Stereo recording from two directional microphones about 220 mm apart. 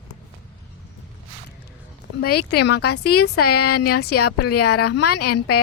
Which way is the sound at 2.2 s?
45° left (ahead or behind).